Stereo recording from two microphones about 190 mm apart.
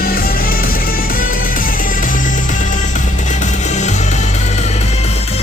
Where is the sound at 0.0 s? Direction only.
50° left (ahead or behind).